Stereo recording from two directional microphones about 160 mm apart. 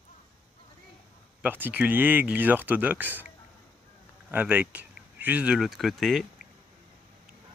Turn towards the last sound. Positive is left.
turn(degrees=0)  # may be behind; listen again after turning